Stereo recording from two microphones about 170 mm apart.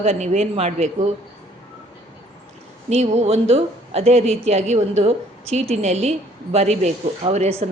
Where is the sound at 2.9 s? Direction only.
40° right (ahead or behind).